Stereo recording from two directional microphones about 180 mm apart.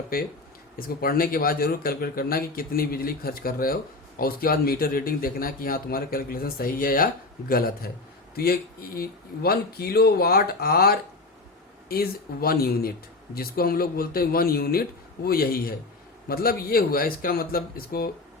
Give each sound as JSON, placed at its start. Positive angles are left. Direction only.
{"t": 0.1, "sound": "a man's voice", "side_deg": 55}